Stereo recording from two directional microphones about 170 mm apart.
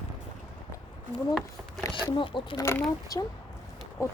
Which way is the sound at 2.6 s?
15° left (ahead or behind).